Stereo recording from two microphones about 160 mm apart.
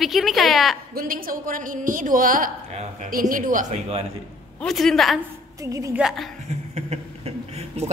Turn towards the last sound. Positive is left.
turn(degrees=-40)  # may be behind; listen again after turning